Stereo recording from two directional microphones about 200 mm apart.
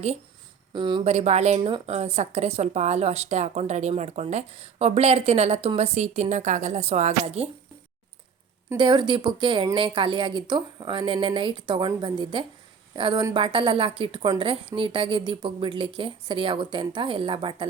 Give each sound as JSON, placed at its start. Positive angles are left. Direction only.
{"t": 0.7, "sound": "speech", "side_deg": -25}
{"t": 8.7, "sound": "speech", "side_deg": -20}